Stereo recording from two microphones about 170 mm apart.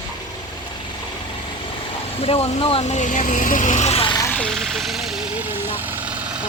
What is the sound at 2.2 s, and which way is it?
Speech, 35° left (ahead or behind).